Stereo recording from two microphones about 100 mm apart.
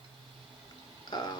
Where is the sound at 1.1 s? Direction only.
45° left (ahead or behind).